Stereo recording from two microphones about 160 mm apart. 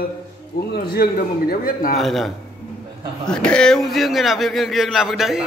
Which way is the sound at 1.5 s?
65° left (ahead or behind).